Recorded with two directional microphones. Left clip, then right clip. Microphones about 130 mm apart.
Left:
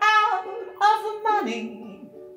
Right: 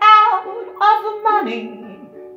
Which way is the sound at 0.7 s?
20° left (ahead or behind).